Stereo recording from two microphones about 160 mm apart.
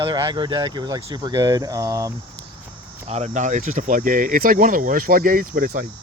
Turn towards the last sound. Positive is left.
turn(degrees=-60)  # may be behind; listen again after turning